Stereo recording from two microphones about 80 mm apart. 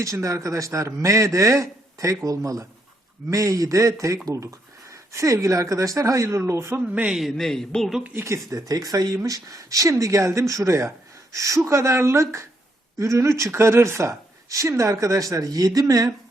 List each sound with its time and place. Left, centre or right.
0.0 s a man's voice: right
6.8 s a man's voice: centre
7.2 s speech: centre
8.1 s speech: right